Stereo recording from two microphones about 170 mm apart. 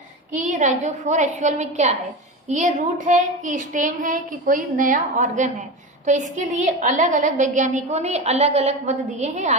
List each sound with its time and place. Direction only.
0.3 s a woman's voice: 45° right (ahead or behind)